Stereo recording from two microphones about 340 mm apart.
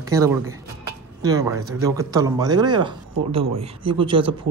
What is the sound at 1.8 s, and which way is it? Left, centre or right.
A woman's voice, centre.